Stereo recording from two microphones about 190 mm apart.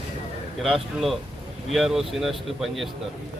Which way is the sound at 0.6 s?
Centre (ahead or behind).